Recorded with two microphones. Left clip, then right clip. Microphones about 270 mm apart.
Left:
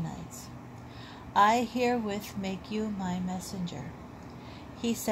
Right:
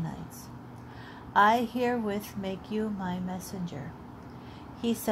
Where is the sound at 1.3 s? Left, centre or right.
Right.